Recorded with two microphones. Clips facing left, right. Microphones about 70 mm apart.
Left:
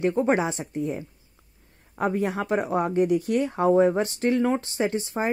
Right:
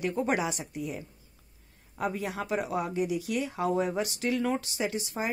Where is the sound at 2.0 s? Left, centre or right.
Left.